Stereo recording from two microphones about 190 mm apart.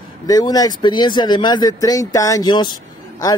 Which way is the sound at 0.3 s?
20° left (ahead or behind).